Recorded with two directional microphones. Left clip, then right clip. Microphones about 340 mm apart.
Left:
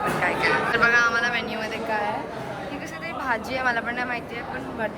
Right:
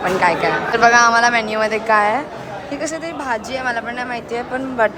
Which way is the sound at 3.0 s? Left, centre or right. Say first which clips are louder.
Right 4 dB; centre.